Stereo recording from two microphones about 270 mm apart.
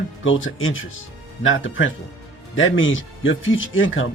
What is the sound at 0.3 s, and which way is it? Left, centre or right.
Speech, left.